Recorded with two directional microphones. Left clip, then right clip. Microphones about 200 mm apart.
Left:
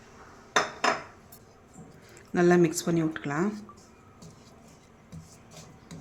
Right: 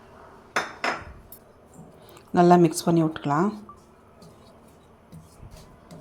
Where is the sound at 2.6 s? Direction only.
20° right (ahead or behind).